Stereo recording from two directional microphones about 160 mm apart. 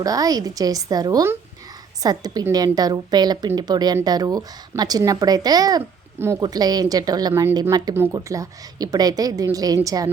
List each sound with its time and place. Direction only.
0.0 s a woman's voice: 20° right (ahead or behind)